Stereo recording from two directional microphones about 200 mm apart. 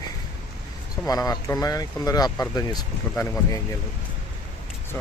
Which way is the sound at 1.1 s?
20° left (ahead or behind).